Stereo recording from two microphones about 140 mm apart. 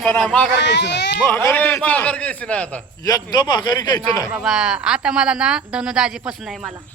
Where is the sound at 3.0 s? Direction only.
30° left (ahead or behind).